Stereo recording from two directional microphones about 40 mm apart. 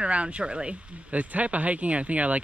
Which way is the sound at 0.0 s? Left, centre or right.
Right.